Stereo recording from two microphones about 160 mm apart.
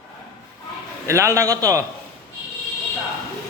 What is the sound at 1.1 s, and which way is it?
Speech, 20° right (ahead or behind).